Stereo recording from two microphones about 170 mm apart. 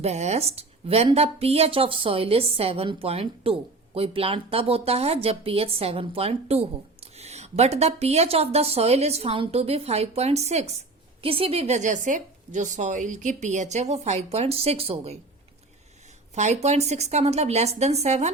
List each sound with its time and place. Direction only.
0.0 s speech: 40° right (ahead or behind)
16.3 s speech: 40° right (ahead or behind)